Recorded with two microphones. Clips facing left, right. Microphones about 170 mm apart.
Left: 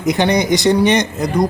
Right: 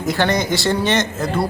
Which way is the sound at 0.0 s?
20° left (ahead or behind).